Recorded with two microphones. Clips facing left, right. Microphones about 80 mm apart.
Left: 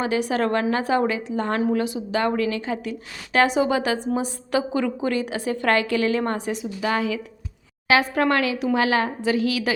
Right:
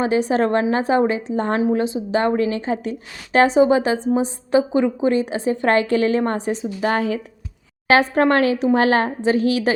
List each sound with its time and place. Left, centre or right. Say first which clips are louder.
0.0 s a woman's voice: right 4 dB; right